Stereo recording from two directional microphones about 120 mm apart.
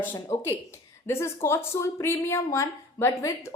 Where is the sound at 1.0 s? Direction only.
20° left (ahead or behind).